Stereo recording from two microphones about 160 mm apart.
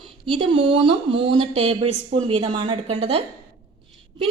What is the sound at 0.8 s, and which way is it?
Speech, 35° right (ahead or behind).